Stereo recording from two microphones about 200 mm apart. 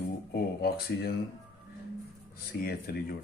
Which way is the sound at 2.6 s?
50° left (ahead or behind).